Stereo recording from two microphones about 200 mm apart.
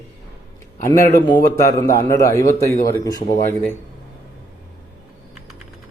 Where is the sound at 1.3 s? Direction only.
20° left (ahead or behind).